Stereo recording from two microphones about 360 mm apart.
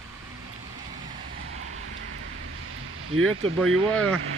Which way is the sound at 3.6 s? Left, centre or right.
Right.